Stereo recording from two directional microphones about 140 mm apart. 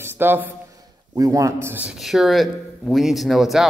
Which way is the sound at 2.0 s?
Centre (ahead or behind).